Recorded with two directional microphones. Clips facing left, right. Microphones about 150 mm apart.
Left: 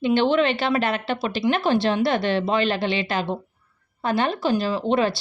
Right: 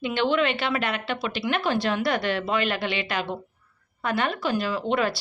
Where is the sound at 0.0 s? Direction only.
30° left (ahead or behind).